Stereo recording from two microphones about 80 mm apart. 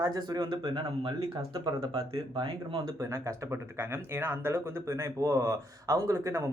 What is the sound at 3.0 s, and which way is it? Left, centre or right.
Speech, right.